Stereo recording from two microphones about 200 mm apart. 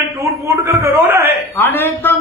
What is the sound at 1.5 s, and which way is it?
Speech, 10° left (ahead or behind).